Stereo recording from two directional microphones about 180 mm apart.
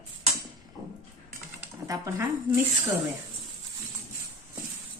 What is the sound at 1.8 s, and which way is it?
Speech, 20° right (ahead or behind).